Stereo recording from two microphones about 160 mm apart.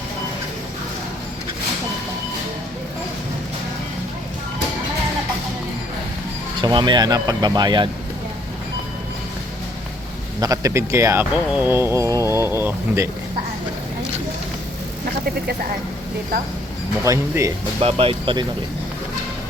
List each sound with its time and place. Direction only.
6.6 s speech: 30° right (ahead or behind)
10.4 s speech: 20° right (ahead or behind)
17.0 s speech: 20° right (ahead or behind)
17.7 s speech: 40° right (ahead or behind)